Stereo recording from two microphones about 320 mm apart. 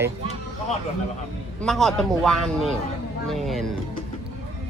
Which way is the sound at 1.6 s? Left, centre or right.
Centre.